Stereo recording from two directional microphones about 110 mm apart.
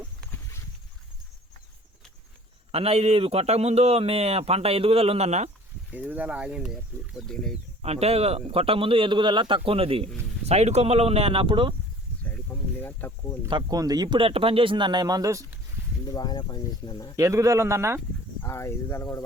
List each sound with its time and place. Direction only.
2.7 s a man's voice: 65° right (ahead or behind); by 5.5 s 85° right
5.9 s speech: 15° right (ahead or behind); by 7.5 s 5° left (ahead or behind)
7.8 s a man's voice: 70° right (ahead or behind)
10.4 s a man's voice: 75° right (ahead or behind); by 11.7 s 50° right (ahead or behind)
12.8 s speech: 15° left (ahead or behind)
13.5 s speech: 35° right (ahead or behind)
14.2 s speech: 60° right (ahead or behind); by 15.4 s 30° right (ahead or behind)
16.1 s speech: 40° left (ahead or behind)
17.2 s speech: 30° right (ahead or behind)
18.4 s speech: 25° left (ahead or behind)